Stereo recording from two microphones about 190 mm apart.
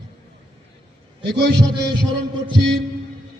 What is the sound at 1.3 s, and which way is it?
Speech, 65° right (ahead or behind).